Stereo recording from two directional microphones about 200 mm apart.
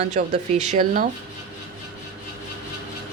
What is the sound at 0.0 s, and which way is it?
Speech, 35° right (ahead or behind).